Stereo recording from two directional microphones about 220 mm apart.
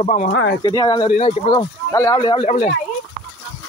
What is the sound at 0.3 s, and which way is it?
Speech, 55° left (ahead or behind).